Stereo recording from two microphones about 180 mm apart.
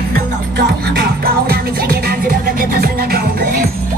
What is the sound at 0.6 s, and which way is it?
Music, 60° right (ahead or behind).